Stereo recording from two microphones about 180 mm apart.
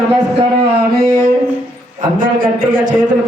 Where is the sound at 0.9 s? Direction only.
55° right (ahead or behind).